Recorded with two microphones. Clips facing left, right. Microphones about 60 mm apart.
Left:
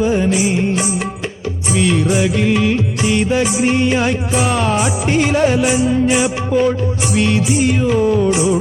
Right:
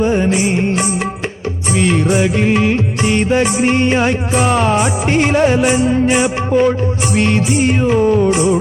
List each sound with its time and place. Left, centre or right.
0.0 s music: right
2.2 s music: right
3.0 s music: right
5.5 s music: right
7.9 s music: right
8.3 s music: right